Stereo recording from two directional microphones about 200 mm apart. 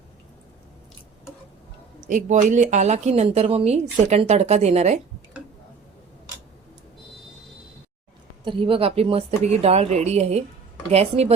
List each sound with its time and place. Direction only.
2.0 s speech: 40° right (ahead or behind)
8.4 s speech: 25° right (ahead or behind)